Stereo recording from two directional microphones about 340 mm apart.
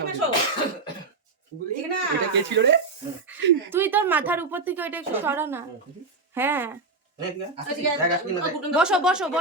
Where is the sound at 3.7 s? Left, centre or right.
Centre.